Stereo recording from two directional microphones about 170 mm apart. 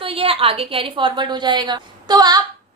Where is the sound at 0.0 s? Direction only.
35° right (ahead or behind).